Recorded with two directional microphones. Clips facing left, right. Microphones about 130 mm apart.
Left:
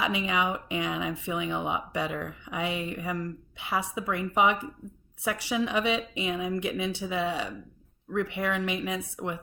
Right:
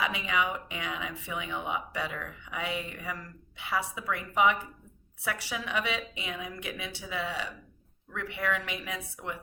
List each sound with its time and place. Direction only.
0.0 s speech: 20° left (ahead or behind)